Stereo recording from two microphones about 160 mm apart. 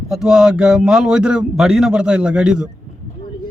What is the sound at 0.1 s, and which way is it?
Speech, 5° right (ahead or behind).